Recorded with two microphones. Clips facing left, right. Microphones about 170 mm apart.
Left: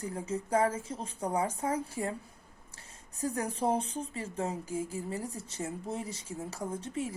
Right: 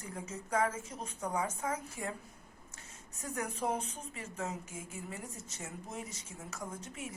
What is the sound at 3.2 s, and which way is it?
Speech, 30° left (ahead or behind).